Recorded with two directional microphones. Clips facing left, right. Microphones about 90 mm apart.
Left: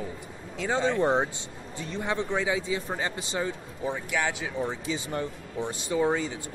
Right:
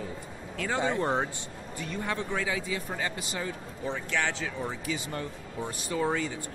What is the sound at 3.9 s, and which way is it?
A man's voice, 10° left (ahead or behind).